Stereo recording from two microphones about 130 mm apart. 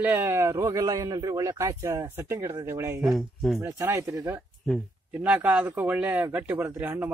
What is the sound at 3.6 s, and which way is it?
Speech, 20° right (ahead or behind).